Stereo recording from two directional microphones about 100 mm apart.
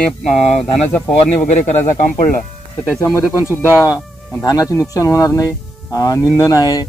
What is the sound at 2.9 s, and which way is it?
Speech, 30° left (ahead or behind).